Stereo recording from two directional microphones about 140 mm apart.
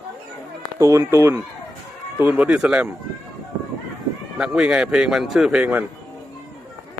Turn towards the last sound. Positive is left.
turn(degrees=-10)  # may be behind; listen again after turning